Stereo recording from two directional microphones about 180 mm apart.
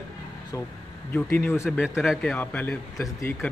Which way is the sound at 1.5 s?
5° right (ahead or behind).